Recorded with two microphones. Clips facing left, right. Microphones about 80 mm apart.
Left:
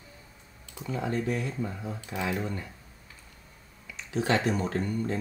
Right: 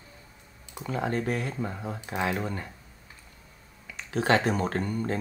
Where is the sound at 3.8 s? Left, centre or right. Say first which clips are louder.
Right 2 dB; right.